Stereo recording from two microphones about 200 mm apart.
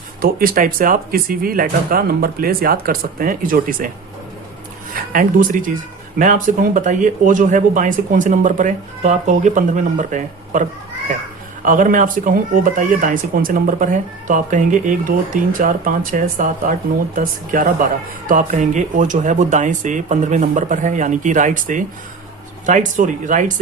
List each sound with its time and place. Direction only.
0.2 s speech: 45° right (ahead or behind)
4.9 s speech: 45° right (ahead or behind)